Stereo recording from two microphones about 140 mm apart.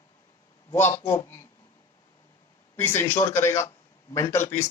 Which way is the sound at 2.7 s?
15° left (ahead or behind).